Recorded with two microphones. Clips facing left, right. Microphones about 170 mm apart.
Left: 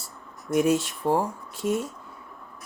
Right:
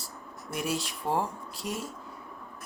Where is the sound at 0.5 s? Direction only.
50° left (ahead or behind).